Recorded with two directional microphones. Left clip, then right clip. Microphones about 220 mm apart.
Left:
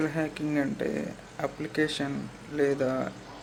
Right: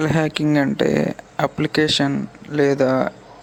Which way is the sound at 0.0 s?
45° right (ahead or behind).